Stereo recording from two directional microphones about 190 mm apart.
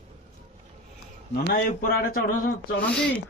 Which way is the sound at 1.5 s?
50° left (ahead or behind).